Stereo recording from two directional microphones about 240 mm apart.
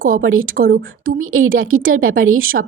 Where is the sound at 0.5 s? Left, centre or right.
Right.